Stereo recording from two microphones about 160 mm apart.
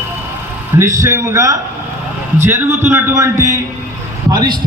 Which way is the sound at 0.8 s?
20° right (ahead or behind).